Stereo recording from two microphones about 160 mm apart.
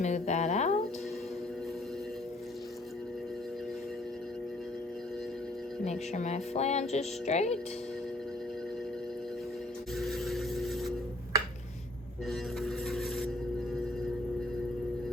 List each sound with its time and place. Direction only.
0.0 s speech: 45° left (ahead or behind)
5.8 s music: 45° left (ahead or behind)
10.0 s vehicle: centre (ahead or behind)
12.3 s music: centre (ahead or behind)